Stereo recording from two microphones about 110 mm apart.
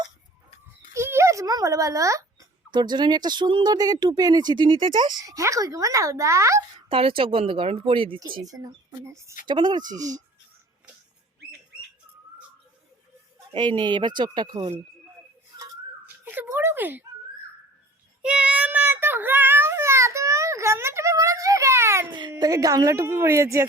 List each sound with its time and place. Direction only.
0.9 s babbling: 25° right (ahead or behind)
2.7 s speech: 40° right (ahead or behind); by 6.6 s 25° right (ahead or behind)
6.8 s a woman's voice: 55° right (ahead or behind)
8.2 s a woman's voice: 35° right (ahead or behind)
9.5 s speech: 45° right (ahead or behind)
13.5 s speech: 45° right (ahead or behind)
16.0 s a sound: 15° right (ahead or behind)
18.2 s child singing: 10° right (ahead or behind)
22.4 s a woman's voice: 35° right (ahead or behind)